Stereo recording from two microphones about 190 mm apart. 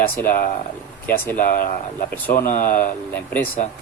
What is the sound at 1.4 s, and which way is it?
Speech, 45° left (ahead or behind).